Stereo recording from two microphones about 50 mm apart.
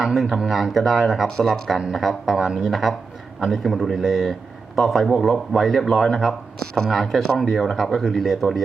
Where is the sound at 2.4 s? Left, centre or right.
Centre.